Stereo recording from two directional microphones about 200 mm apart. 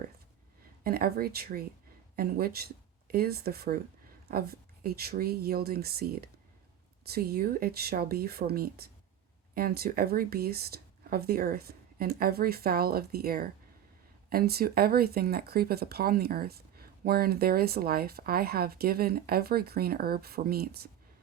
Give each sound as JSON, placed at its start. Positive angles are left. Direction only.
{"t": 0.9, "sound": "speech", "side_deg": -50}